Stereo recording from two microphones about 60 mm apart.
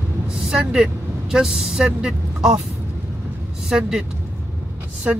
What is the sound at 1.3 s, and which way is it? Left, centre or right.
Speech, centre.